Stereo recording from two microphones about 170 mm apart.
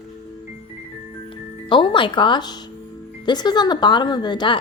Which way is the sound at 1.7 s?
30° left (ahead or behind).